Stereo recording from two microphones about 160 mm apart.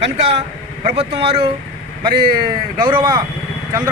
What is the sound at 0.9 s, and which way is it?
Speech, 35° right (ahead or behind).